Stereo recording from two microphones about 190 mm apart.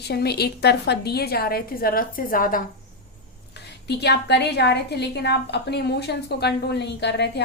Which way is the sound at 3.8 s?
60° left (ahead or behind).